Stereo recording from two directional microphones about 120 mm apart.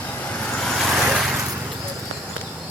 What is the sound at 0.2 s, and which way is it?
Vehicle, 10° left (ahead or behind).